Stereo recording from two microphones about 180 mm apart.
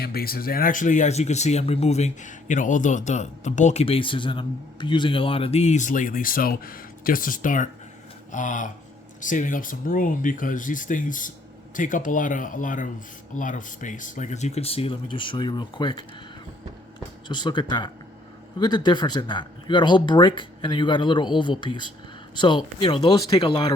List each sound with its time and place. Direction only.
0.0 s speech: 55° left (ahead or behind); by 16.0 s 25° left (ahead or behind)
17.2 s speech: 25° left (ahead or behind)